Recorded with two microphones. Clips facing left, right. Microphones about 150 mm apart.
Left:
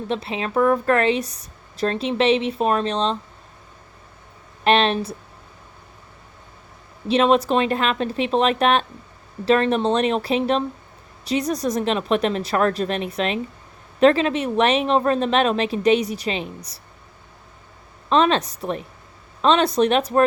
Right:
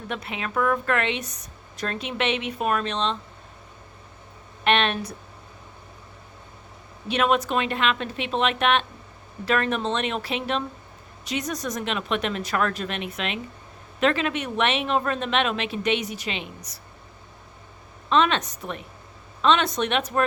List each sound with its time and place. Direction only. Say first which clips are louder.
0.1 s a woman's voice: left 5 dB; 30° left (ahead or behind)
4.6 s a woman's voice: left 5 dB; 35° left (ahead or behind)
7.1 s a woman's voice: left 5 dB; 30° left (ahead or behind)
18.1 s a woman's voice: left 4 dB; 35° left (ahead or behind)